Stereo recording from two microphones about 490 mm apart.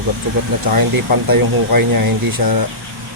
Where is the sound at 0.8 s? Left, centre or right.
Right.